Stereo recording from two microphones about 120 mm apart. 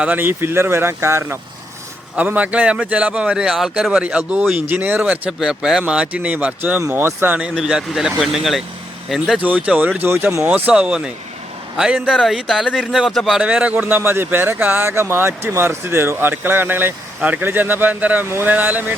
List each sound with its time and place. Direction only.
0.0 s a man's voice: 15° right (ahead or behind)
7.3 s a man's voice: 5° right (ahead or behind)